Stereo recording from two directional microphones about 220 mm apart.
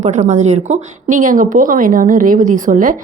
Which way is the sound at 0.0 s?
35° right (ahead or behind).